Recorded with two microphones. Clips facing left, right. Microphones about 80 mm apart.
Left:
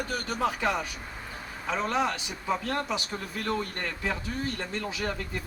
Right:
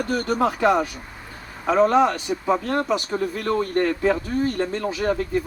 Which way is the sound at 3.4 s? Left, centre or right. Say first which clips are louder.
Right 10 dB; right.